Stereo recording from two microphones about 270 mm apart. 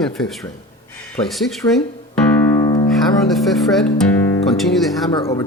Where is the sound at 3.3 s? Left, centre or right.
Centre.